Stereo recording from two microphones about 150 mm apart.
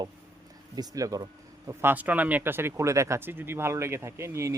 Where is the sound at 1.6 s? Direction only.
15° right (ahead or behind).